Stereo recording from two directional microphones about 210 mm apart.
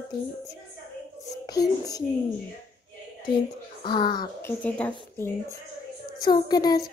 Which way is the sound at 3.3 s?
20° left (ahead or behind).